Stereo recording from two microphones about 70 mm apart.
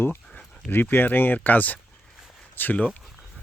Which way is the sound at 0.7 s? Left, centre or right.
Left.